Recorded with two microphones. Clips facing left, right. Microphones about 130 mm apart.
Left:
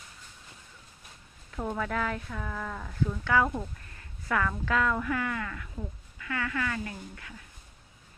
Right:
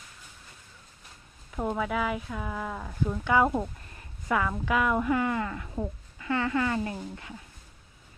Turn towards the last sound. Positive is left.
turn(degrees=-25)  # may be behind; listen again after turning